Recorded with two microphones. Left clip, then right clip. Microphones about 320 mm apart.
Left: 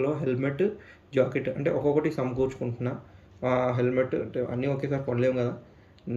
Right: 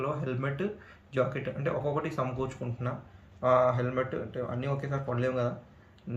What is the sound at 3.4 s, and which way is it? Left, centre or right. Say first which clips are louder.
Speech: right 1 dB; right.